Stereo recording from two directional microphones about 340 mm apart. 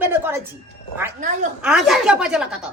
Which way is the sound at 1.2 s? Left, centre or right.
Right.